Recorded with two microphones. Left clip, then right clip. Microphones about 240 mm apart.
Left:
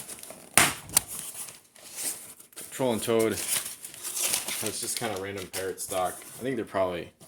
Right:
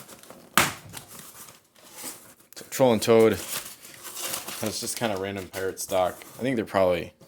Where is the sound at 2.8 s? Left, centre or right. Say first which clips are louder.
Right 7 dB; right.